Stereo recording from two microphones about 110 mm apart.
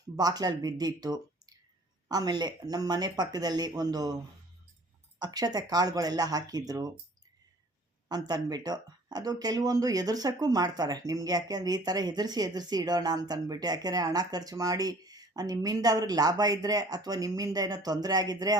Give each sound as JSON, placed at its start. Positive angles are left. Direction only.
{"t": 0.2, "sound": "speech", "side_deg": -35}
{"t": 5.2, "sound": "speech", "side_deg": -35}
{"t": 8.0, "sound": "speech", "side_deg": -35}